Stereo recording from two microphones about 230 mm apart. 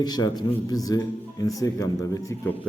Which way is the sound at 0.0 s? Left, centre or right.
Centre.